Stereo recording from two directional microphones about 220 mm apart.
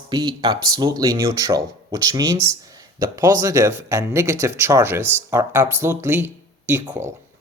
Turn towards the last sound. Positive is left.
turn(degrees=-10)  # may be behind; listen again after turning